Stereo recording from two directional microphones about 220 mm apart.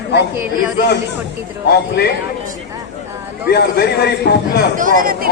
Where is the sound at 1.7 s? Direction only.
45° left (ahead or behind).